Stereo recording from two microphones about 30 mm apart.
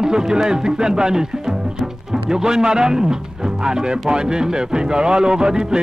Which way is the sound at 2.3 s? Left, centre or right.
Right.